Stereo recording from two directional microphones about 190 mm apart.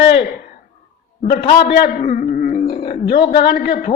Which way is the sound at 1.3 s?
55° left (ahead or behind).